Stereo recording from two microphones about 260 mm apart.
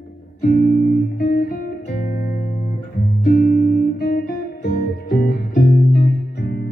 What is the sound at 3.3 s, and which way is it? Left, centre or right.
Guitar, left.